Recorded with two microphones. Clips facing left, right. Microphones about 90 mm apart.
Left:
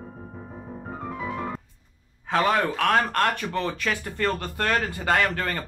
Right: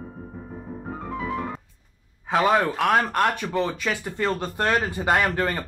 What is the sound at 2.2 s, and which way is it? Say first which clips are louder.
Speech: right 2 dB; 10° right (ahead or behind).